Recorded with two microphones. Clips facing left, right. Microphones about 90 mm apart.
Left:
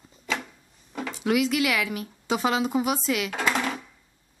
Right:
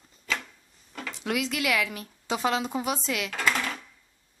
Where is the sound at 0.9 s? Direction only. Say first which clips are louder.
Left 6 dB; 10° left (ahead or behind).